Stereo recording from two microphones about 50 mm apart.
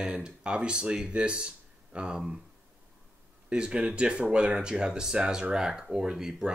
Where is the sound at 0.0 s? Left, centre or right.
Right.